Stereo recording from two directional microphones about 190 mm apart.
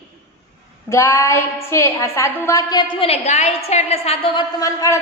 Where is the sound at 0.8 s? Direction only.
15° left (ahead or behind); by 4.4 s 30° left (ahead or behind).